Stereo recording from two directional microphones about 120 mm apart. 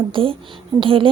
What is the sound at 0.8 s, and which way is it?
Speech, 45° right (ahead or behind).